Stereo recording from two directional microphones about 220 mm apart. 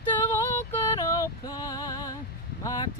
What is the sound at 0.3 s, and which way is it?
Female singing, 10° left (ahead or behind).